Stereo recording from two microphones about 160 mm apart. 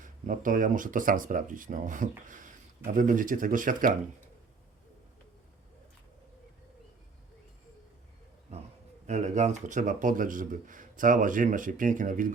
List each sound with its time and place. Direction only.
0.0 s speech: 55° right (ahead or behind)
9.0 s speech: 45° right (ahead or behind)